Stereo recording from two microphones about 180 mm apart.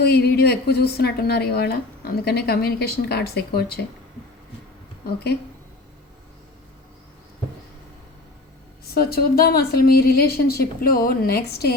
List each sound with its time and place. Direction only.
0.0 s a woman's voice: 65° left (ahead or behind)
9.0 s a woman's voice: 60° left (ahead or behind)